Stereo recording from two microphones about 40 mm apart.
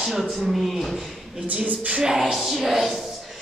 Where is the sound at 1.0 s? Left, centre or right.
Centre.